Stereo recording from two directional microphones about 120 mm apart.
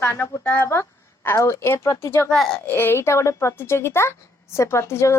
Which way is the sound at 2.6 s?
15° left (ahead or behind).